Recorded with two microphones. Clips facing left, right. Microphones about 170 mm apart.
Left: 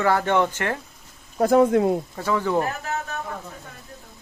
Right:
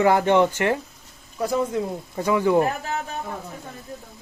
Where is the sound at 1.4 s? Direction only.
55° left (ahead or behind).